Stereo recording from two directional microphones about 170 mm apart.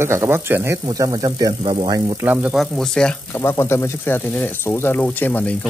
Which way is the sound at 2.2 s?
10° right (ahead or behind).